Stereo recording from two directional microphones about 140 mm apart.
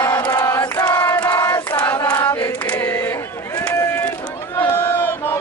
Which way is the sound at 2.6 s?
10° left (ahead or behind).